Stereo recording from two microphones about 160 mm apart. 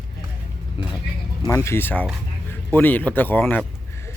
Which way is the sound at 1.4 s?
15° left (ahead or behind).